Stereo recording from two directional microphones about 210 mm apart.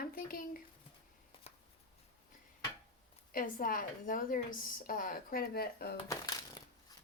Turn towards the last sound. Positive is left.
turn(degrees=15)  # may be behind; listen again after turning